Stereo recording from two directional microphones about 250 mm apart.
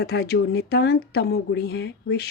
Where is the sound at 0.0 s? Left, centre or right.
Left.